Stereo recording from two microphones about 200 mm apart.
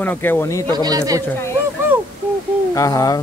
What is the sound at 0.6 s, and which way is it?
Speech, 20° right (ahead or behind).